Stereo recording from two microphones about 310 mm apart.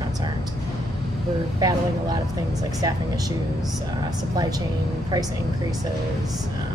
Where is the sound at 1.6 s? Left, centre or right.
Centre.